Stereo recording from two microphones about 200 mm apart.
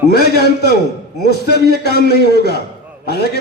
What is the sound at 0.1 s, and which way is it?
A man's voice, 55° left (ahead or behind).